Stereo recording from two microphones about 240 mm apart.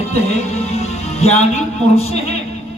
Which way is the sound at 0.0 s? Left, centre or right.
Left.